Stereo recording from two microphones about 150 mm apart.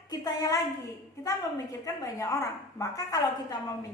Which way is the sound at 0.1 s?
20° left (ahead or behind).